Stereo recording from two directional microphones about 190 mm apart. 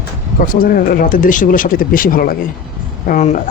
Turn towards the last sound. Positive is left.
turn(degrees=40)  # may be behind; listen again after turning